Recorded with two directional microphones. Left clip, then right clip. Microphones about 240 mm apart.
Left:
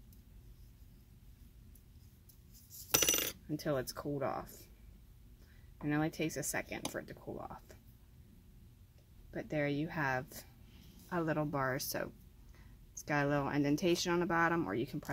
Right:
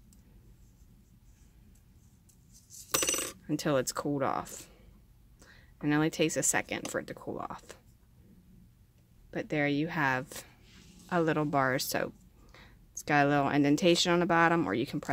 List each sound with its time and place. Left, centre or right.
3.4 s speech: right
5.8 s speech: right
9.3 s speech: right